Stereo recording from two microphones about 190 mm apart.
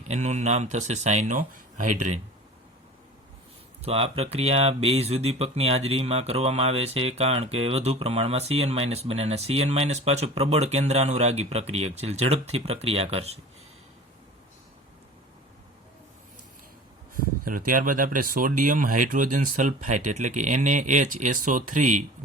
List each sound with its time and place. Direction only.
0.1 s speech: 35° right (ahead or behind)
3.8 s speech: 30° right (ahead or behind)
17.4 s speech: 45° right (ahead or behind)